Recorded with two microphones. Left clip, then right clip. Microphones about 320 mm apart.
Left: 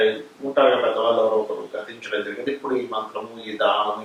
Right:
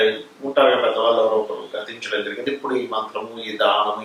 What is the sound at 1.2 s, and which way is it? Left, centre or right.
Speech, left.